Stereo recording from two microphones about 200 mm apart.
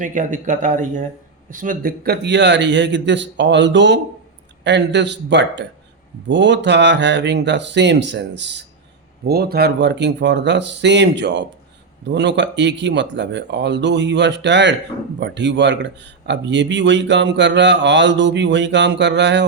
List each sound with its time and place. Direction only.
0.0 s a man's voice: 40° right (ahead or behind); by 19.5 s 60° right (ahead or behind)